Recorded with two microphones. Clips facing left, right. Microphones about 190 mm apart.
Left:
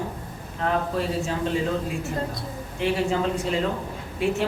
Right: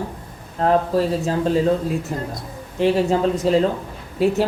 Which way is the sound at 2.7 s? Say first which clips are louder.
Right 6 dB; 35° right (ahead or behind).